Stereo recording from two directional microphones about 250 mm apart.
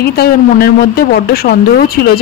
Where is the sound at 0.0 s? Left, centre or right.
Left.